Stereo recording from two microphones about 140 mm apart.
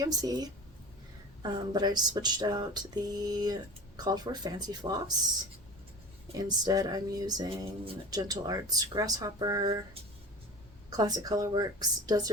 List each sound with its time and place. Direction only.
0.0 s speech: 25° right (ahead or behind)
6.3 s speech: 25° right (ahead or behind)
10.8 s speech: 30° right (ahead or behind)